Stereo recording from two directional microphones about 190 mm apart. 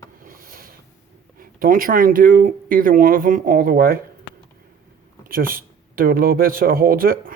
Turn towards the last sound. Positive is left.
turn(degrees=-50)  # may be behind; listen again after turning